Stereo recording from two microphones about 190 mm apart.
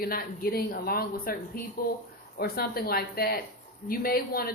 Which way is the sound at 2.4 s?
55° left (ahead or behind).